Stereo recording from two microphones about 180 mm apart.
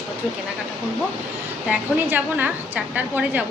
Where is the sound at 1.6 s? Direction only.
10° right (ahead or behind).